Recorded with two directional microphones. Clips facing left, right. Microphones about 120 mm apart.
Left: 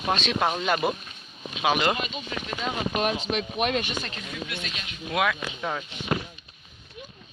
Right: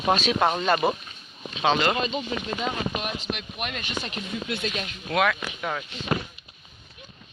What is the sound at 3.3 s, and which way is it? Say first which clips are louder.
Speech: left 4 dB; 90° left.